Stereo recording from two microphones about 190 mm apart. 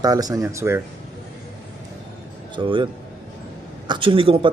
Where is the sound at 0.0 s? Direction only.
20° right (ahead or behind).